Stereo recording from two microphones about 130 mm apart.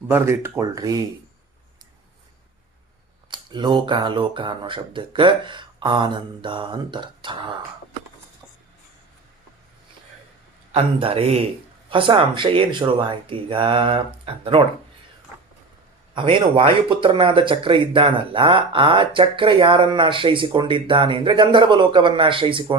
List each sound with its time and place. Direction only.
0.1 s speech: 20° right (ahead or behind)
3.2 s speech: 35° right (ahead or behind)
10.7 s speech: 50° right (ahead or behind)
16.1 s speech: 40° right (ahead or behind)